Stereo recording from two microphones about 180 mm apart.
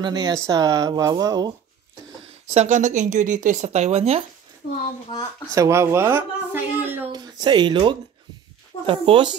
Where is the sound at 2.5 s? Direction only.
45° right (ahead or behind).